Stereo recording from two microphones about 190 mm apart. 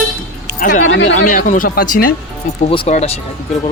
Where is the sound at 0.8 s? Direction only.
90° left.